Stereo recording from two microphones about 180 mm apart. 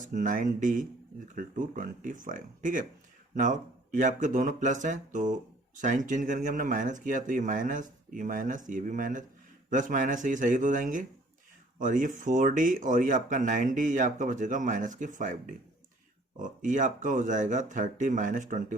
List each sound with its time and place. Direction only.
0.0 s speech: 45° right (ahead or behind)